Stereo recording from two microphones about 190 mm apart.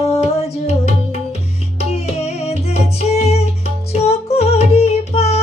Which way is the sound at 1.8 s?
35° left (ahead or behind).